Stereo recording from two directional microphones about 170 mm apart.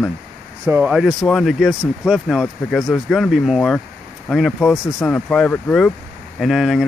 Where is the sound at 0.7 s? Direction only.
10° right (ahead or behind).